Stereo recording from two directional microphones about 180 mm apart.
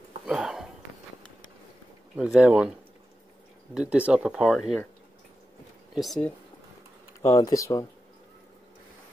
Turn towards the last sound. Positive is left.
turn(degrees=20)  # may be behind; listen again after turning